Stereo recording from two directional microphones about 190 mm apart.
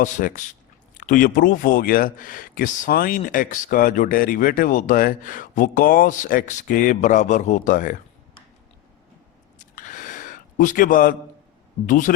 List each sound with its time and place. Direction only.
0.0 s speech: 45° left (ahead or behind)
9.6 s a sound: 45° left (ahead or behind)
11.9 s speech: 45° left (ahead or behind)